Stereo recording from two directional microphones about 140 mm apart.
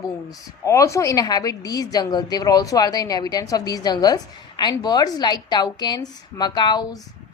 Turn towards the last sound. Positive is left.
turn(degrees=30)  # may be behind; listen again after turning